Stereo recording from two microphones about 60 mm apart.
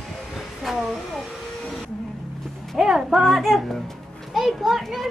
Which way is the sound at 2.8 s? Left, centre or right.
Centre.